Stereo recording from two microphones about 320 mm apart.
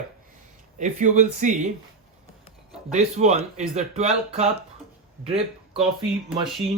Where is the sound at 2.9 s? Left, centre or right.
Right.